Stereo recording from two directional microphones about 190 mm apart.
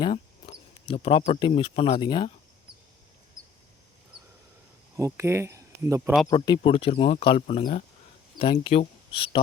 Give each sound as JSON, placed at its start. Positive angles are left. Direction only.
{"t": 0.0, "sound": "speech", "side_deg": 25}
{"t": 4.9, "sound": "speech", "side_deg": -15}
{"t": 6.2, "sound": "speech", "side_deg": 20}